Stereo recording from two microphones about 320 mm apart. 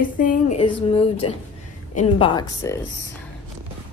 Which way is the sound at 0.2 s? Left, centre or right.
Left.